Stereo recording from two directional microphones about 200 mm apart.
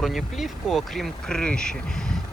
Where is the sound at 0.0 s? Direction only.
Centre (ahead or behind).